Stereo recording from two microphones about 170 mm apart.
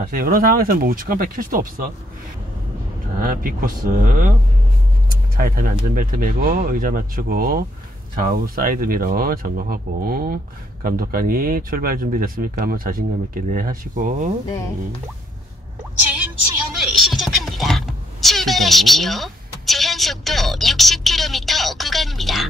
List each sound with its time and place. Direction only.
0.0 s speech: 55° right (ahead or behind)
3.2 s speech: 55° right (ahead or behind)
5.3 s speech: 55° right (ahead or behind)
16.7 s a sound: centre (ahead or behind)